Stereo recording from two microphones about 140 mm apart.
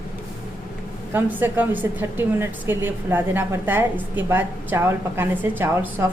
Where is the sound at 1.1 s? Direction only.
15° right (ahead or behind).